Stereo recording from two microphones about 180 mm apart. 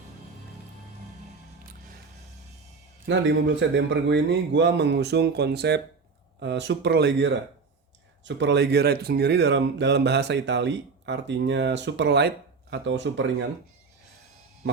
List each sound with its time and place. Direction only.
3.1 s speech: 85° right; by 5.8 s 70° right (ahead or behind)
6.4 s speech: 80° right